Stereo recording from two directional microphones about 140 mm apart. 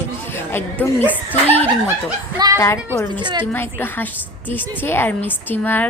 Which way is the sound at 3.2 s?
35° right (ahead or behind).